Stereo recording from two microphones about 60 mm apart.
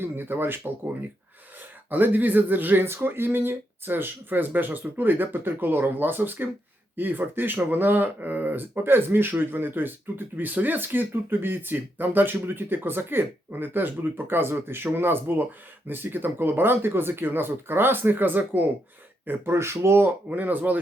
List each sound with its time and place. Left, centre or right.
0.0 s speech: right
1.9 s speech: right
19.5 s speech: right
20.3 s speech: right